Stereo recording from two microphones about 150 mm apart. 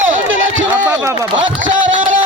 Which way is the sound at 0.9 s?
20° right (ahead or behind).